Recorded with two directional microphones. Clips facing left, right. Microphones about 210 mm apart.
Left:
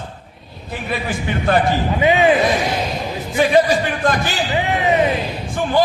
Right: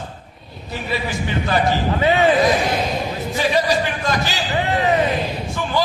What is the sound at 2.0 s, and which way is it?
Speech, 15° left (ahead or behind).